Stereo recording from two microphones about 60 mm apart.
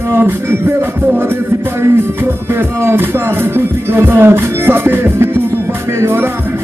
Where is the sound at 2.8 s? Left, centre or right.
Right.